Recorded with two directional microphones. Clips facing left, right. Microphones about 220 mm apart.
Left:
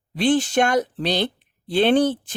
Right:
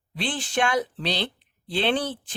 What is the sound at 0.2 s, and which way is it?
Speech, 45° left (ahead or behind).